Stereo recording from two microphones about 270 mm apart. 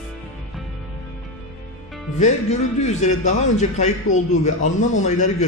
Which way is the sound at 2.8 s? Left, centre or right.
Left.